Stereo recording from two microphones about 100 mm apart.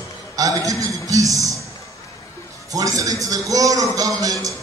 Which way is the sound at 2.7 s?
35° right (ahead or behind).